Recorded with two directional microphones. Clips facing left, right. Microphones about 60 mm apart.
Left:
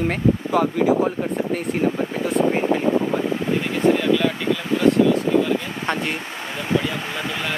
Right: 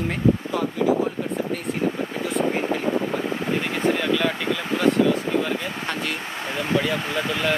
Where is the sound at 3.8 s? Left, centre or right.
Centre.